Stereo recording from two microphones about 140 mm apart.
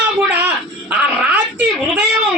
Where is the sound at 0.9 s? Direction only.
10° right (ahead or behind).